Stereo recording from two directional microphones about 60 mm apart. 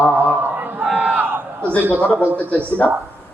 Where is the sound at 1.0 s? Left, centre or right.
Right.